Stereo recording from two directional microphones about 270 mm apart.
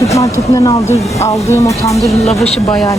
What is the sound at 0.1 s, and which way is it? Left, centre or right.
Speech, centre.